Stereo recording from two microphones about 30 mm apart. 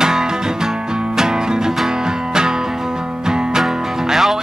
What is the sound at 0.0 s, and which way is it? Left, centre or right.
Music, right.